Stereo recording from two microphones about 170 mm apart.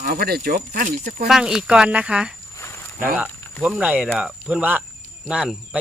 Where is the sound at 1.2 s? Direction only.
5° right (ahead or behind).